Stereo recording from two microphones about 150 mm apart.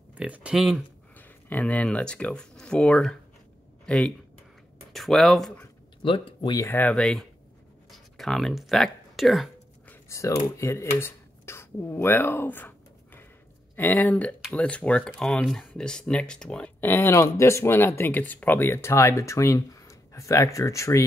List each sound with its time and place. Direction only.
0.1 s speech: 10° right (ahead or behind)
1.1 s speech: 10° left (ahead or behind)
6.0 s speech: 35° left (ahead or behind)
6.6 s speech: 15° left (ahead or behind)
7.9 s a sound: centre (ahead or behind)
10.0 s speech: 20° left (ahead or behind)